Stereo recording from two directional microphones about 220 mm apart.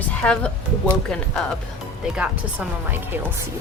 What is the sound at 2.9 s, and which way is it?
Speech, 10° right (ahead or behind).